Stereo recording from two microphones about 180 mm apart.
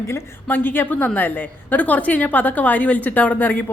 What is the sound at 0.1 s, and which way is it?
A woman's voice, 10° left (ahead or behind).